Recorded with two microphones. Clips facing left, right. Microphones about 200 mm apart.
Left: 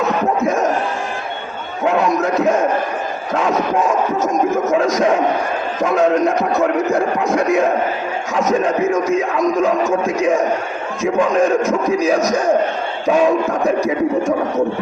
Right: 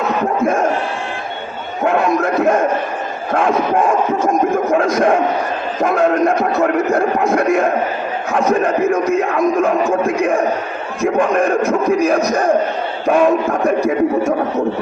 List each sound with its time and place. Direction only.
1.8 s a man's voice: 55° right (ahead or behind)